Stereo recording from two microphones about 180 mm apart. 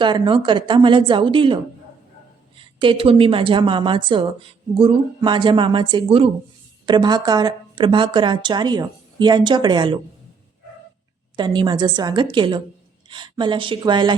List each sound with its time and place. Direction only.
0.0 s a woman's voice: 25° right (ahead or behind)
2.6 s a woman's voice: 30° right (ahead or behind)
11.3 s a woman's voice: 25° right (ahead or behind)